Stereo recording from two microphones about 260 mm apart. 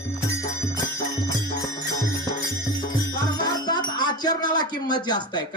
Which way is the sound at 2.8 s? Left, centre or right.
Centre.